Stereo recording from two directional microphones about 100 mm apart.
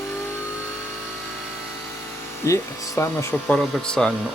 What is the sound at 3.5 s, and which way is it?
Speech, 5° left (ahead or behind).